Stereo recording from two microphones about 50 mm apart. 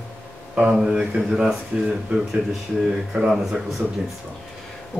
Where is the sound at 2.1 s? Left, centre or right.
Right.